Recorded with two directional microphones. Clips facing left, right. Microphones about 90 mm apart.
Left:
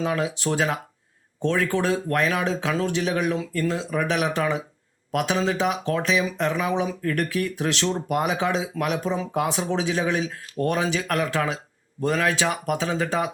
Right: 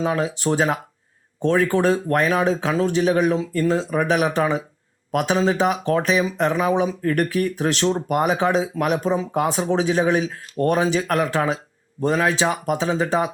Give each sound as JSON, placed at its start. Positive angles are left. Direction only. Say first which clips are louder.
{"t": 0.0, "sound": "speech", "louder": "right 3 dB", "side_deg": -30}
{"t": 3.3, "sound": "speech", "louder": "right 4 dB", "side_deg": -25}
{"t": 3.7, "sound": "speech", "louder": "right 6 dB", "side_deg": -40}
{"t": 11.9, "sound": "speech", "louder": "right 3 dB", "side_deg": -25}